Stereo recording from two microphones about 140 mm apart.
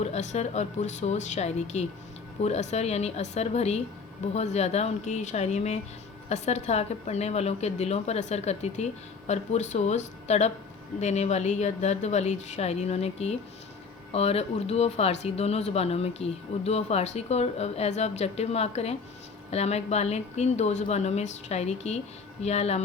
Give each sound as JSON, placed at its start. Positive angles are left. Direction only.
{"t": 0.0, "sound": "speech", "side_deg": 55}